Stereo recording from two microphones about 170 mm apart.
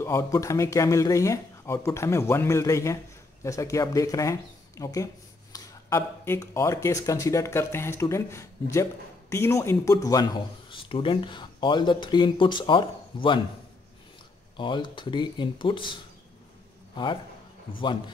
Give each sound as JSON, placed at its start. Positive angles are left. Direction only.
{"t": 0.0, "sound": "speech", "side_deg": 20}
{"t": 10.7, "sound": "speech", "side_deg": 30}
{"t": 14.6, "sound": "a man's voice", "side_deg": 30}